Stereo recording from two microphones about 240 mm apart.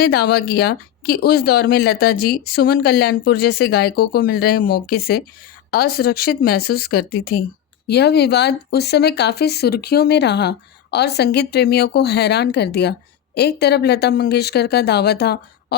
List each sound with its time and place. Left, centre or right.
0.0 s speech: left